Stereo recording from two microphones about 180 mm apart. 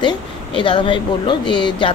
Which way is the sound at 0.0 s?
30° left (ahead or behind).